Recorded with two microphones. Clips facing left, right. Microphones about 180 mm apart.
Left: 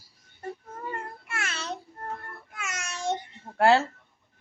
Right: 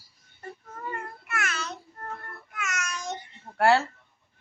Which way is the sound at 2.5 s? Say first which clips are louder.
Right 4 dB; 30° left (ahead or behind).